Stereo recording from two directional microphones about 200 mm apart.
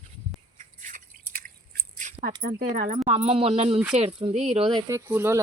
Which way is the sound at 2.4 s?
45° right (ahead or behind).